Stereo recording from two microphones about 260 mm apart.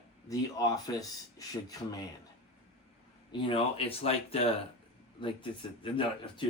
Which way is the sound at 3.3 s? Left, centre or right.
Centre.